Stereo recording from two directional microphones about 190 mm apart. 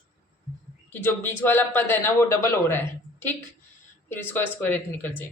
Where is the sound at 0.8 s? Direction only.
10° left (ahead or behind).